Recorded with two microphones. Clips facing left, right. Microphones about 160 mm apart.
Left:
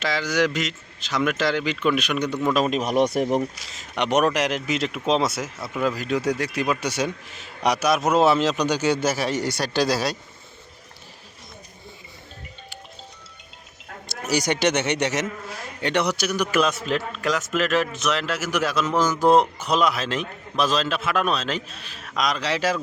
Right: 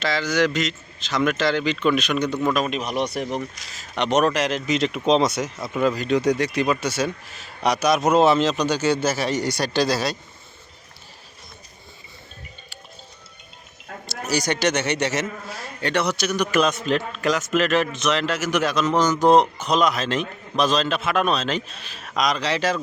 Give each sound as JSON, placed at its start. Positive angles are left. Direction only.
{"t": 0.0, "sound": "speech", "side_deg": 10}
{"t": 2.6, "sound": "speech", "side_deg": 45}
{"t": 3.7, "sound": "speech", "side_deg": 15}
{"t": 14.1, "sound": "a man's voice", "side_deg": 20}